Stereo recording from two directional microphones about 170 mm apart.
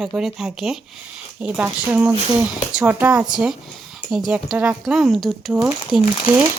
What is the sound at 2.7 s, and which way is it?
Speech, 10° right (ahead or behind).